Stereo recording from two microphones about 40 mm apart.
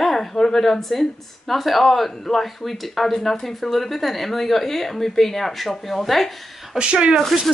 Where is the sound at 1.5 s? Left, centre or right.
Centre.